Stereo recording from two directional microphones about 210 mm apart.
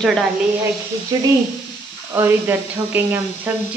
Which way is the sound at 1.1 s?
20° right (ahead or behind).